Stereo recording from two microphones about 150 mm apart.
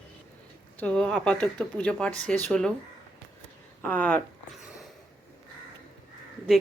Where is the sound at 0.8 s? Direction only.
5° left (ahead or behind).